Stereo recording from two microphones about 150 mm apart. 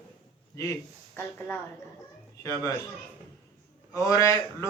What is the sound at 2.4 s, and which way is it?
Speech, 20° left (ahead or behind).